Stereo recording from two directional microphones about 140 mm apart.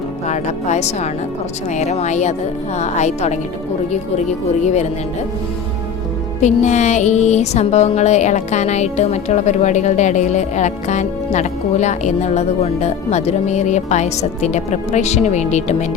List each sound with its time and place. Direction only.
0.3 s speech: 55° left (ahead or behind)
4.6 s speech: 55° left (ahead or behind)
6.4 s speech: 60° left (ahead or behind)